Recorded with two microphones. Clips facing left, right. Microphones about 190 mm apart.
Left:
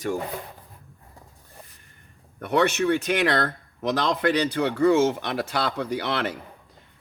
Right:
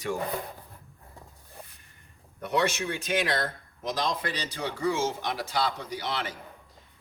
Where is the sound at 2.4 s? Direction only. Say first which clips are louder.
Left 6 dB; 60° left (ahead or behind).